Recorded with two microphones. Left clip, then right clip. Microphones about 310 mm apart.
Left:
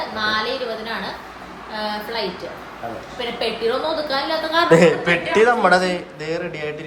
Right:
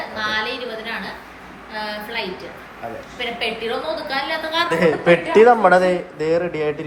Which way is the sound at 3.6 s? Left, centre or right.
Centre.